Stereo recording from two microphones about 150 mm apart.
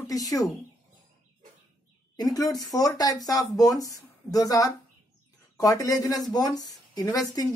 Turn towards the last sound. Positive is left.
turn(degrees=25)  # may be behind; listen again after turning